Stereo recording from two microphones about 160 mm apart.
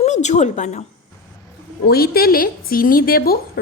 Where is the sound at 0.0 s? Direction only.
45° left (ahead or behind).